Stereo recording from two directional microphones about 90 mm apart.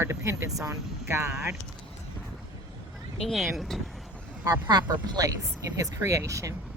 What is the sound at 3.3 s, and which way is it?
Speech, centre (ahead or behind).